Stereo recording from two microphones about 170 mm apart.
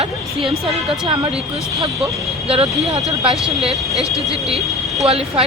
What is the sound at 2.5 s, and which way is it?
Speech, 35° right (ahead or behind).